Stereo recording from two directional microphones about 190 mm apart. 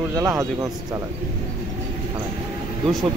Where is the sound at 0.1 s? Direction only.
15° right (ahead or behind).